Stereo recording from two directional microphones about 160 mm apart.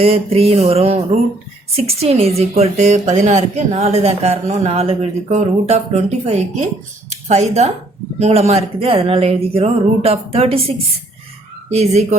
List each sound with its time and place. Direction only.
0.0 s a woman's voice: 40° right (ahead or behind)